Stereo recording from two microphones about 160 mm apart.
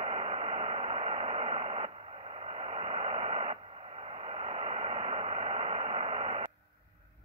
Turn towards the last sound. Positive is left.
turn(degrees=-40)  # may be behind; listen again after turning